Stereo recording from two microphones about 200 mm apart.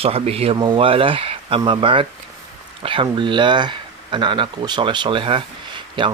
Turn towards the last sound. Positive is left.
turn(degrees=-25)  # may be behind; listen again after turning